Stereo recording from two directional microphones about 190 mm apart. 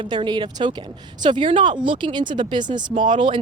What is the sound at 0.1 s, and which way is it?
Speech, 25° right (ahead or behind).